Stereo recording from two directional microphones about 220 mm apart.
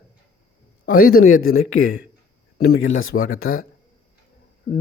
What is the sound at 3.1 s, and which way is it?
Speech, 50° left (ahead or behind).